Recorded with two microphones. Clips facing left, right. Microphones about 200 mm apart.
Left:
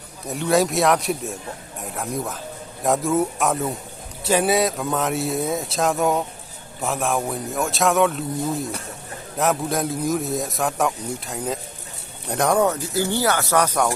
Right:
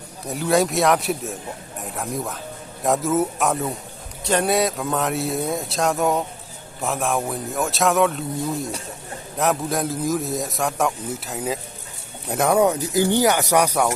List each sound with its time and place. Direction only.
0.3 s a man's voice: centre (ahead or behind)